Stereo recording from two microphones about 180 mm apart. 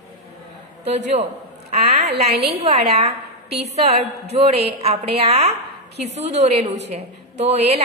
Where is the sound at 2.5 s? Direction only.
35° right (ahead or behind).